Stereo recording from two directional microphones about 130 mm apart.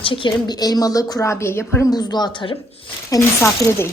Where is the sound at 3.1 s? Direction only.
20° left (ahead or behind).